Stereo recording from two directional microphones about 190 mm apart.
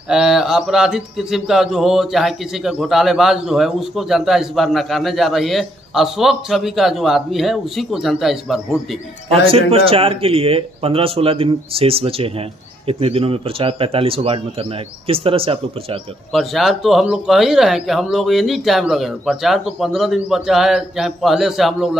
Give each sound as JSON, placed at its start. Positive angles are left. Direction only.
{"t": 0.1, "sound": "speech", "side_deg": 0}
{"t": 9.3, "sound": "speech", "side_deg": -30}
{"t": 16.3, "sound": "speech", "side_deg": 0}